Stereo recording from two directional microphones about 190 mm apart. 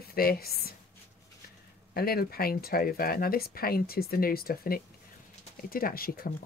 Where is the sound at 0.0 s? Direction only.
55° left (ahead or behind).